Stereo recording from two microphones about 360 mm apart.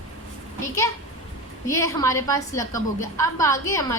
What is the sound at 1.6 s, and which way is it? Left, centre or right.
A woman's voice, centre.